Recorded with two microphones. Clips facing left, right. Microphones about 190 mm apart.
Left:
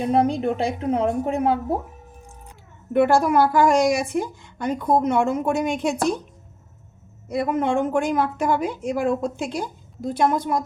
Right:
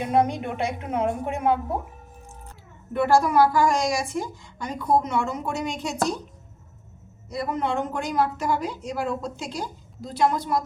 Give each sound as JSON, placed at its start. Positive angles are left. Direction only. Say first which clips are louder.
{"t": 0.1, "sound": "a woman's voice", "louder": "left 3 dB", "side_deg": 30}
{"t": 2.9, "sound": "a woman's voice", "louder": "left 3 dB", "side_deg": 55}
{"t": 7.3, "sound": "a woman's voice", "louder": "left 5 dB", "side_deg": 50}